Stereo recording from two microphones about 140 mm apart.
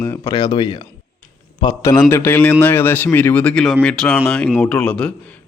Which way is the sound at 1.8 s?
20° left (ahead or behind).